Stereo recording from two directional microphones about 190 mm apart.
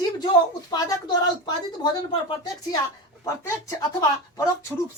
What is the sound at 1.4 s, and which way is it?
Speech, 25° left (ahead or behind).